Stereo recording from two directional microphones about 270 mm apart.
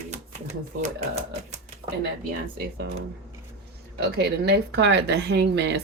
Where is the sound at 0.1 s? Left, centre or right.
Right.